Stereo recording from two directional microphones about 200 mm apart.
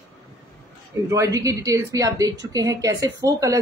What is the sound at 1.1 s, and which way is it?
Speech, 15° right (ahead or behind).